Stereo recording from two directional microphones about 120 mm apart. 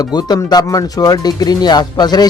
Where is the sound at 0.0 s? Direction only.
35° left (ahead or behind).